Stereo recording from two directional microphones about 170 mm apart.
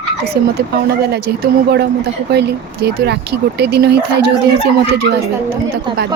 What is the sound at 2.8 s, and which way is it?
Speech, 70° right (ahead or behind).